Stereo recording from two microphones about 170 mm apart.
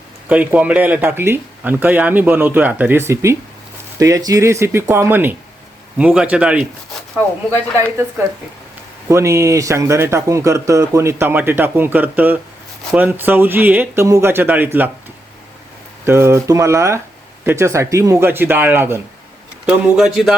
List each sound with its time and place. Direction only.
0.3 s speech: 10° right (ahead or behind)
9.0 s speech: 15° right (ahead or behind)
16.0 s speech: 15° right (ahead or behind)
19.6 s speech: centre (ahead or behind)